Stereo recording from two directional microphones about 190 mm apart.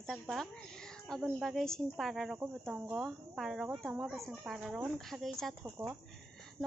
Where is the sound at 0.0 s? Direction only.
Centre (ahead or behind).